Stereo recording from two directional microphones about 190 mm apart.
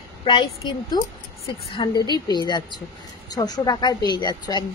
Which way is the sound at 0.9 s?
20° left (ahead or behind).